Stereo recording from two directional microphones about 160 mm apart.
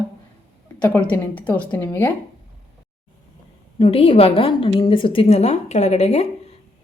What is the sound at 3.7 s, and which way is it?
A woman's voice, 35° left (ahead or behind).